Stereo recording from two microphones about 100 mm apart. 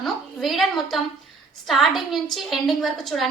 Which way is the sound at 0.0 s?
Centre (ahead or behind).